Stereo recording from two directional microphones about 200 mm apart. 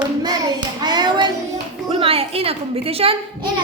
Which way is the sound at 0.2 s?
20° right (ahead or behind).